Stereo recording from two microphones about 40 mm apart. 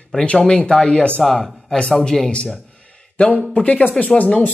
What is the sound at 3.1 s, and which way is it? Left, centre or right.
Speech, left.